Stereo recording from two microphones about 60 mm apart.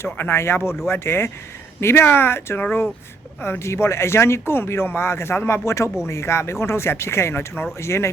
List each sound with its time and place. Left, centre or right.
0.0 s speech: left